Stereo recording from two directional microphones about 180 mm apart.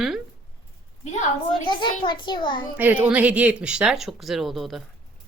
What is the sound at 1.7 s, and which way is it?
Speech, 25° left (ahead or behind).